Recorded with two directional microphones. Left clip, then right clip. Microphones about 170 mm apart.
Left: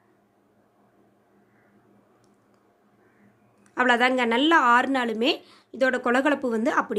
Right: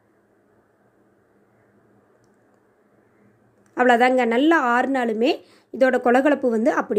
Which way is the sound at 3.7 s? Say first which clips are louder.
Right 4 dB; 25° right (ahead or behind).